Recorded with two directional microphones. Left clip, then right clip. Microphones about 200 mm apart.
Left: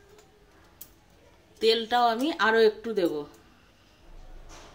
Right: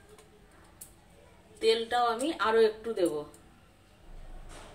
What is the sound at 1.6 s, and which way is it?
Speech, 50° left (ahead or behind).